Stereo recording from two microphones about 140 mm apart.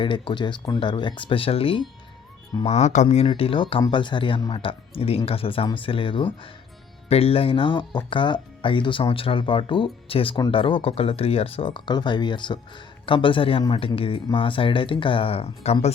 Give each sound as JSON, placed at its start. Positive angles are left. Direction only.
{"t": 0.0, "sound": "speech", "side_deg": 35}
{"t": 2.6, "sound": "speech", "side_deg": 55}
{"t": 3.2, "sound": "speech", "side_deg": 40}